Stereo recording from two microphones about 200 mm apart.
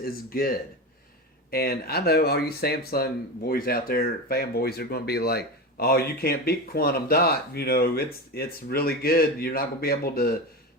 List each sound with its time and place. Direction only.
0.0 s speech: 45° left (ahead or behind)